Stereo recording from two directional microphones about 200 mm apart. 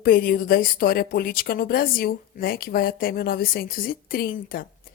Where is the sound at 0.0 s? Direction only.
45° left (ahead or behind).